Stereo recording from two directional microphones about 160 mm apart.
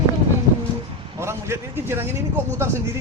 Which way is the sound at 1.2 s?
15° right (ahead or behind).